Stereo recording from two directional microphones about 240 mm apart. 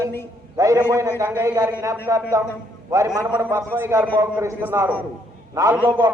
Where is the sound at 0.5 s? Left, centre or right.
Centre.